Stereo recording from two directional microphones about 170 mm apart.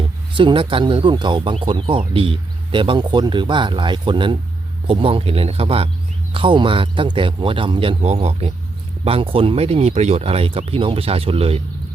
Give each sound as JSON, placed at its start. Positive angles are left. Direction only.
{"t": 0.3, "sound": "speech", "side_deg": -30}